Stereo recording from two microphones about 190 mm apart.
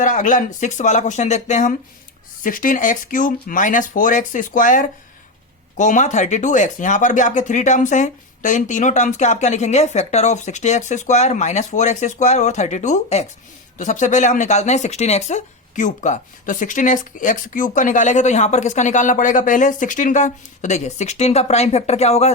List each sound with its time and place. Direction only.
0.0 s speech: 40° left (ahead or behind)